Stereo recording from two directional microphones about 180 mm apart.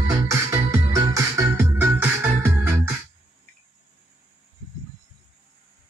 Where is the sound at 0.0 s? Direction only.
15° right (ahead or behind).